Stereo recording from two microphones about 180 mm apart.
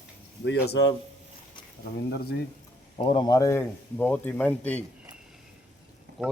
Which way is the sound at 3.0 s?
25° left (ahead or behind).